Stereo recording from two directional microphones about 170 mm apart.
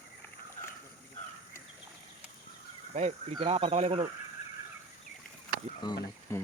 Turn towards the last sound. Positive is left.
turn(degrees=25)  # may be behind; listen again after turning